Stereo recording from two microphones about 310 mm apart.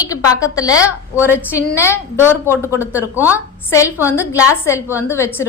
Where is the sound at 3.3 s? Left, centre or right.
Centre.